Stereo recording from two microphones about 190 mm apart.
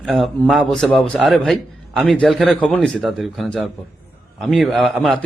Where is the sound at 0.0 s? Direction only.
Centre (ahead or behind).